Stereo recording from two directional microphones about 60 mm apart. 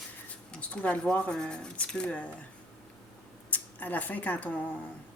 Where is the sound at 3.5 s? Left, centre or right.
Left.